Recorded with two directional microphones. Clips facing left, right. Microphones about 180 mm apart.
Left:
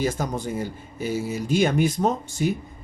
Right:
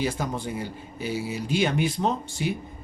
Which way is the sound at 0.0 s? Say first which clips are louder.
Left 2 dB; 45° left (ahead or behind).